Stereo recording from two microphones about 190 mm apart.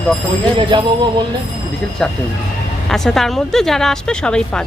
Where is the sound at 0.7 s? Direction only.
25° right (ahead or behind).